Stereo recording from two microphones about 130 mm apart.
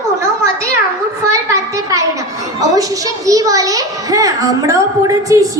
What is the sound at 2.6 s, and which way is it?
A child's voice, 25° right (ahead or behind).